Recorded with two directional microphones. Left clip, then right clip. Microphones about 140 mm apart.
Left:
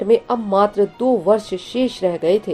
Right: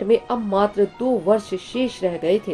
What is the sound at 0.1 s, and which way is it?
A woman's voice, 40° left (ahead or behind).